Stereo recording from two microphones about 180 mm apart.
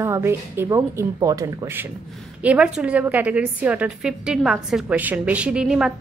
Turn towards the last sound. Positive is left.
turn(degrees=-5)  # may be behind; listen again after turning